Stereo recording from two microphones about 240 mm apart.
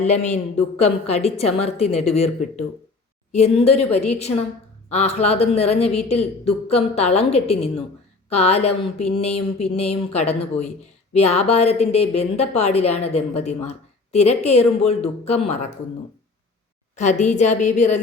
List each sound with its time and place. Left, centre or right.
0.0 s a woman's voice: left
16.9 s a woman's voice: left